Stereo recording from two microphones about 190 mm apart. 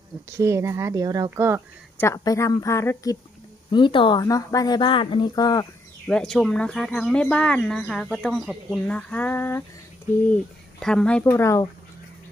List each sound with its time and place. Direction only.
0.3 s speech: 15° right (ahead or behind)
2.0 s a woman's voice: 15° left (ahead or behind)
6.1 s speech: 5° left (ahead or behind)